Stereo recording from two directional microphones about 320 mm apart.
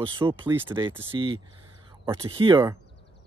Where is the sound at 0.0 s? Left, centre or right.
Centre.